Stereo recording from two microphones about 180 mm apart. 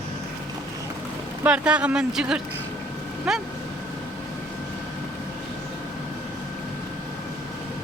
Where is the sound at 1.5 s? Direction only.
5° right (ahead or behind).